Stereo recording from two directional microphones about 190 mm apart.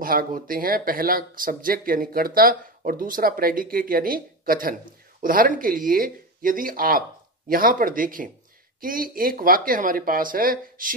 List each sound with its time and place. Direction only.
0.0 s speech: 50° right (ahead or behind)